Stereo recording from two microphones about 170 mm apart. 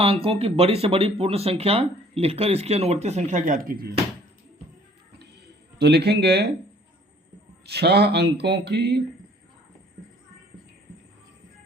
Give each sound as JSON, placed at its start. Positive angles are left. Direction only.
{"t": 0.0, "sound": "speech", "side_deg": -35}
{"t": 5.8, "sound": "speech", "side_deg": -75}
{"t": 7.6, "sound": "speech", "side_deg": -75}